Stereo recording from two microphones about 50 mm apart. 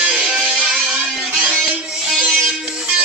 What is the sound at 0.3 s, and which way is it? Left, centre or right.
Music, centre.